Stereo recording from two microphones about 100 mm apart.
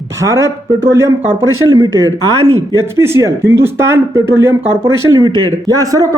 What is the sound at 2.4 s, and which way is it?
Speech, 75° right (ahead or behind).